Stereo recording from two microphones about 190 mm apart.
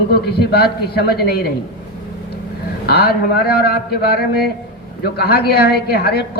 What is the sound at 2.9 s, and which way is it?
A man's voice, 55° left (ahead or behind).